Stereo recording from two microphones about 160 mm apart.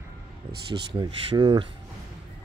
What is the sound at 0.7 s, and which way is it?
Speech, 30° right (ahead or behind).